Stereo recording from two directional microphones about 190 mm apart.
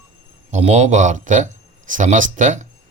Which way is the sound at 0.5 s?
35° right (ahead or behind).